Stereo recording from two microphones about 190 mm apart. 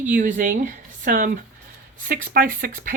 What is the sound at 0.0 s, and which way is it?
Speech, 40° right (ahead or behind).